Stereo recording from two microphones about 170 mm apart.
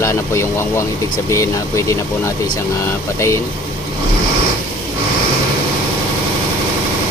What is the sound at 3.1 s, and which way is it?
Speech, 15° left (ahead or behind).